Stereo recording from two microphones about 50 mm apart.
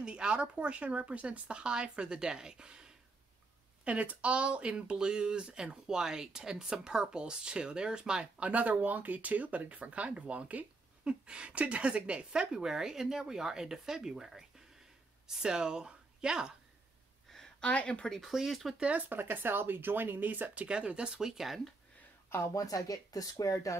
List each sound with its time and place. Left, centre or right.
0.0 s speech: centre
3.8 s a woman's voice: right
17.3 s a sound: centre
17.6 s speech: left
18.3 s speech: centre
18.8 s speech: right
19.1 s speech: right
20.6 s a woman's voice: centre
22.3 s speech: left
23.4 s speech: left